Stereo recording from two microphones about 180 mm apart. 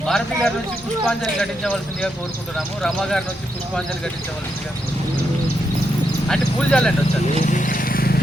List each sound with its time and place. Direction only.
0.0 s speech: 5° left (ahead or behind)
6.2 s speech: 5° left (ahead or behind)
7.4 s vehicle: 45° left (ahead or behind)